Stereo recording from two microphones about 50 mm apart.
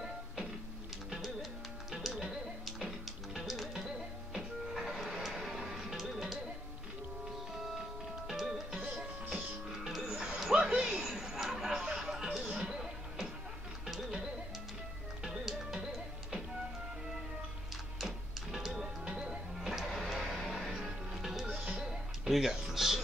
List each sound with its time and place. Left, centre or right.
1.1 s music: centre
3.7 s music: centre
7.5 s music: centre
10.0 s music: centre
10.5 s a sound: centre
12.4 s music: centre
15.4 s music: centre
17.9 s music: centre
19.7 s music: centre
21.5 s music: right
21.8 s music: centre